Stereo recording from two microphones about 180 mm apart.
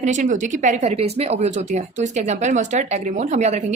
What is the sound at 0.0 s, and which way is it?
A woman's voice, 40° right (ahead or behind).